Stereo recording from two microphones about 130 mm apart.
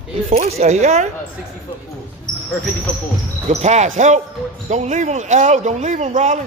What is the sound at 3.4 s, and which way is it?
A man's voice, 60° right (ahead or behind).